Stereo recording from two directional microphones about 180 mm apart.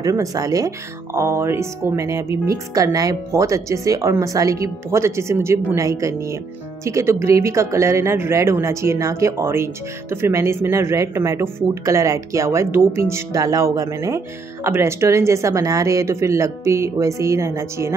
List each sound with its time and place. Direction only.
0.0 s speech: 20° right (ahead or behind)